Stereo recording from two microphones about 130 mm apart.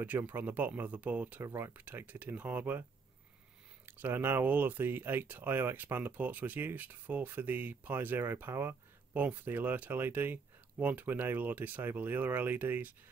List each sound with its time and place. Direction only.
0.3 s speech: 15° right (ahead or behind)
3.8 s speech: 15° right (ahead or behind)